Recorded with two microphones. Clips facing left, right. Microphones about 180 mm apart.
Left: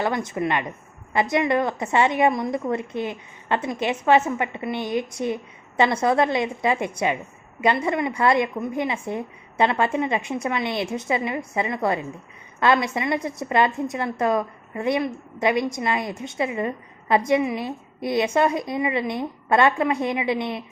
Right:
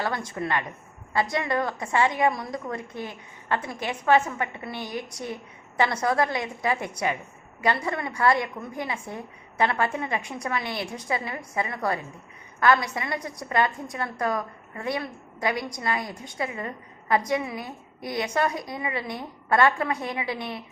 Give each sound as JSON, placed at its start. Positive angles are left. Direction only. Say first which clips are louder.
{"t": 0.0, "sound": "a woman's voice", "louder": "left 5 dB", "side_deg": 20}